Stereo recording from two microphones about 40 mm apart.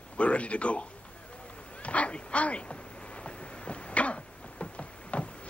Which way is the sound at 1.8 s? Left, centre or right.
Left.